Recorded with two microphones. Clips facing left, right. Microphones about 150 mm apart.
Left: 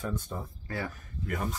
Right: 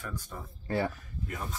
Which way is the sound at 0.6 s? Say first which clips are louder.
Right 7 dB; 30° right (ahead or behind).